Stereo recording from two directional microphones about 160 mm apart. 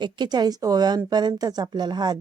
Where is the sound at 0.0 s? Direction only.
25° right (ahead or behind).